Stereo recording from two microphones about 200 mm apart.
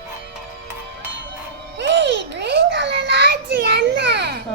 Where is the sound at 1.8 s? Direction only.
60° right (ahead or behind).